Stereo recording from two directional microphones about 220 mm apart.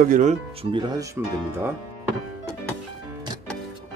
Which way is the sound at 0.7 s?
15° right (ahead or behind).